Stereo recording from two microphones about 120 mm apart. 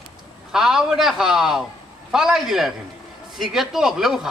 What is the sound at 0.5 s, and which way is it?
A man's voice, 5° right (ahead or behind).